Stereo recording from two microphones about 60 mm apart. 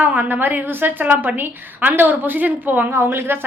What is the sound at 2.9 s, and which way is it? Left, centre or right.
Speech, right.